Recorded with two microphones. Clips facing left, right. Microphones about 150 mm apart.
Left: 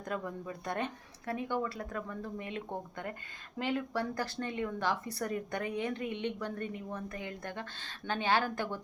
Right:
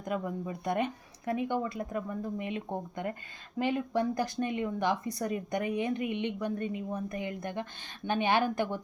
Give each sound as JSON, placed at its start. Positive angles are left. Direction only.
{"t": 0.0, "sound": "speech", "side_deg": -15}
{"t": 3.6, "sound": "speech", "side_deg": -15}